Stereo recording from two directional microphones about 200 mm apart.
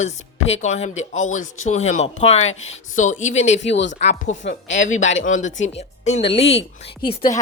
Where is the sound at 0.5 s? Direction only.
35° left (ahead or behind).